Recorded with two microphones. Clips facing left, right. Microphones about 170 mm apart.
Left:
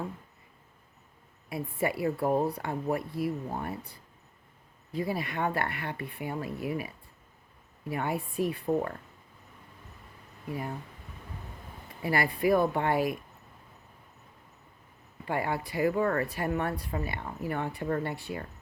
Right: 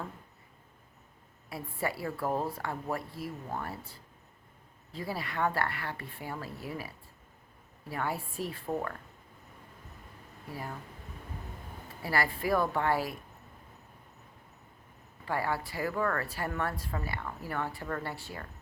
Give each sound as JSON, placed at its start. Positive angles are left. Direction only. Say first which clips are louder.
{"t": 1.5, "sound": "a woman's voice", "louder": "left 4 dB", "side_deg": 20}
{"t": 12.0, "sound": "a woman's voice", "louder": "left 4 dB", "side_deg": 20}
{"t": 15.2, "sound": "a woman's voice", "louder": "left 2 dB", "side_deg": 20}